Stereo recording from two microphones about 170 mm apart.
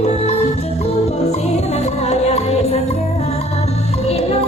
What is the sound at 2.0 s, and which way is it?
Music, 40° left (ahead or behind).